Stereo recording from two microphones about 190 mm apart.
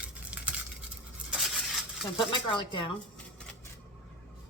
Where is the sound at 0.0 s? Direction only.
5° right (ahead or behind).